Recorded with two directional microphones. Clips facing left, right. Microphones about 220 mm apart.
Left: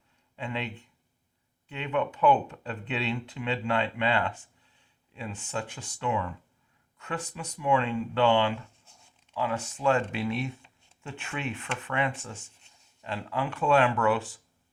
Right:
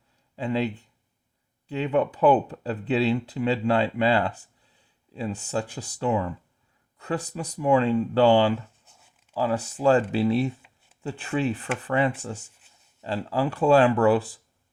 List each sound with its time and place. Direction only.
0.3 s speech: 35° right (ahead or behind)